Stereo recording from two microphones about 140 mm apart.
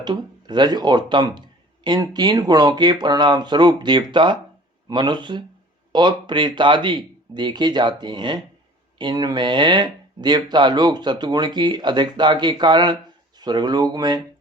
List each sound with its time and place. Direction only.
0.0 s speech: 30° right (ahead or behind)